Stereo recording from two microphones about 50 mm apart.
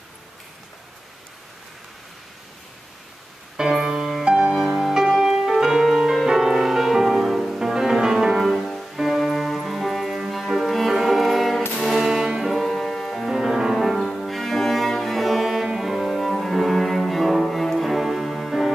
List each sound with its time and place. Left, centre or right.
3.5 s music: centre